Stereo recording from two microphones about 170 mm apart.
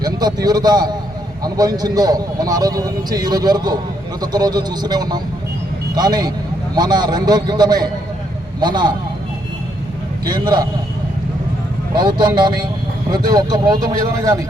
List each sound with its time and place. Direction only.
0.0 s a man's voice: 25° right (ahead or behind)
10.2 s a man's voice: 25° right (ahead or behind)
11.9 s a man's voice: 25° right (ahead or behind)